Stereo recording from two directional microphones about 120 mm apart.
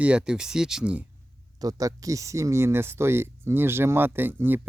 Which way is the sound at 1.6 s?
30° right (ahead or behind).